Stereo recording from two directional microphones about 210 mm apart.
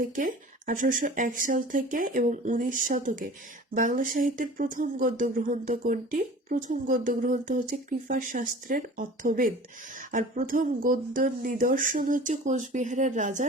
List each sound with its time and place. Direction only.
0.2 s speech: 40° right (ahead or behind)